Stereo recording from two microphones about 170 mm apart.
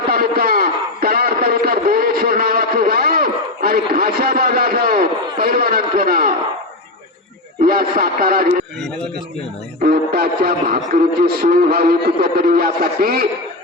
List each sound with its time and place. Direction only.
0.1 s a sound: 60° right (ahead or behind)
7.6 s speech: 55° right (ahead or behind)
9.8 s speech: 65° right (ahead or behind)